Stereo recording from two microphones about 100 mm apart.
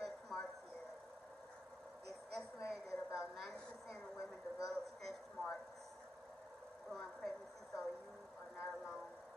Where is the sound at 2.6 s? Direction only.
30° left (ahead or behind).